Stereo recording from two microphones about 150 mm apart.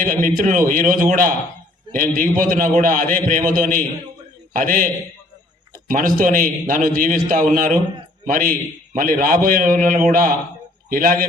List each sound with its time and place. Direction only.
0.0 s a man's voice: 65° right (ahead or behind)
5.9 s a man's voice: 65° right (ahead or behind)